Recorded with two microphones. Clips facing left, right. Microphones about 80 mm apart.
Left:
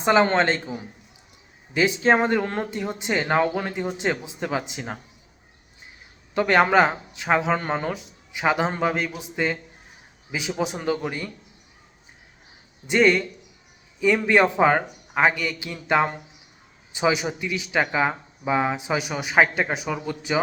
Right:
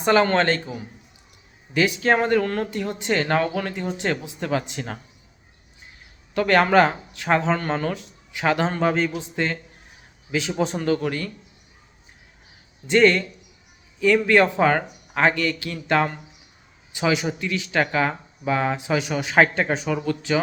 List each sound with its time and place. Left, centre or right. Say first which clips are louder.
0.0 s speech: even; left
6.3 s speech: right 1 dB; centre
8.8 s a man's voice: right 3 dB; centre
12.9 s speech: right 2 dB; centre